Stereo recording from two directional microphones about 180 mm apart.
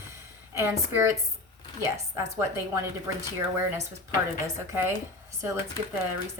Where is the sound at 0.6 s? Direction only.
15° right (ahead or behind).